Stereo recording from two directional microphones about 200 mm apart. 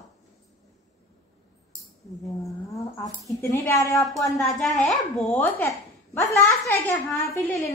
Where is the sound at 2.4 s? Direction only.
15° left (ahead or behind).